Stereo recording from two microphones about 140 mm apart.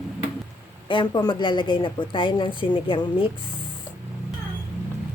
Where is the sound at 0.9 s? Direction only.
35° left (ahead or behind).